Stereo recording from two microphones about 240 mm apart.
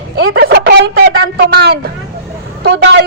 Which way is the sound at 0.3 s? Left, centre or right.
Right.